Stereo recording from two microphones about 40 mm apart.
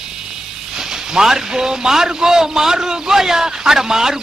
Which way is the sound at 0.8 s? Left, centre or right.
Centre.